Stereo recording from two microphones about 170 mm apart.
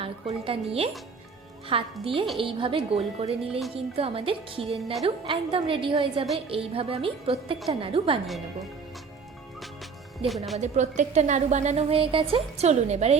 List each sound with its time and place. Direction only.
0.0 s a woman's voice: 35° right (ahead or behind)
10.2 s speech: centre (ahead or behind)
10.6 s a woman's voice: 45° right (ahead or behind)